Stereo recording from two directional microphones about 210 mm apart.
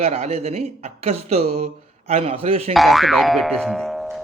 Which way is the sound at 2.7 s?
Centre (ahead or behind).